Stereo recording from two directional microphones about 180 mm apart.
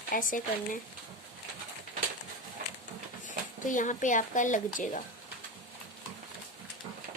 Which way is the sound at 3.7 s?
45° left (ahead or behind).